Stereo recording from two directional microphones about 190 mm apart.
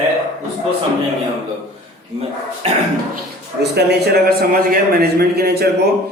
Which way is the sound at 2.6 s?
35° right (ahead or behind).